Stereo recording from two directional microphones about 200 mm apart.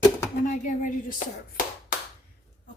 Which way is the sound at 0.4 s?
40° left (ahead or behind).